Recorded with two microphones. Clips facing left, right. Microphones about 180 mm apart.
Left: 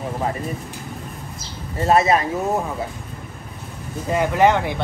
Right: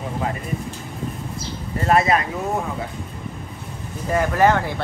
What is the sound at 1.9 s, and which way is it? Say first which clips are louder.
Speech: left 1 dB; 25° left (ahead or behind).